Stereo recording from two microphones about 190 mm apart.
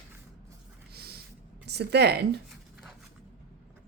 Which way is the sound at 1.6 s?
60° right (ahead or behind).